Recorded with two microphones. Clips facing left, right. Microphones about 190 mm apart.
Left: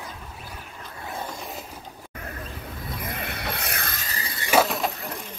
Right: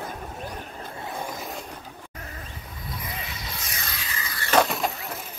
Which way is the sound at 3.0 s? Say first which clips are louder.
Left 8 dB; 55° left (ahead or behind).